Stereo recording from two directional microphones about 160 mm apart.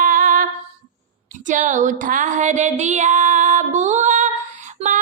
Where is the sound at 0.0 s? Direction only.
55° right (ahead or behind).